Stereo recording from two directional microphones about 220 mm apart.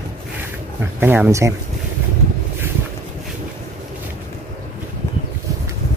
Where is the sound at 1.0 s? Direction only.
10° right (ahead or behind).